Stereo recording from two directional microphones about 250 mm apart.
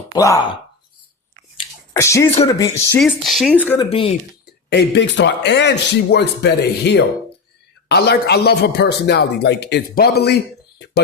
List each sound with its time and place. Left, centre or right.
0.1 s speech: centre
1.5 s a sound: centre
2.6 s speech: centre
3.0 s speech: centre
3.8 s speech: left
4.7 s a man's voice: left